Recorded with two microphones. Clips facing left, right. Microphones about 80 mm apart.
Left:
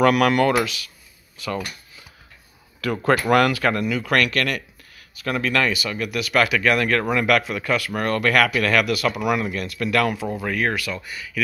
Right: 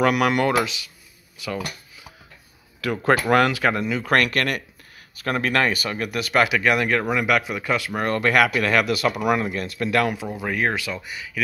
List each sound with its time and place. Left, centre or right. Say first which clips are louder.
0.0 s speech: left 2 dB; centre
3.3 s speech: left 1 dB; right
4.0 s speech: right 2 dB; right
6.3 s speech: even; centre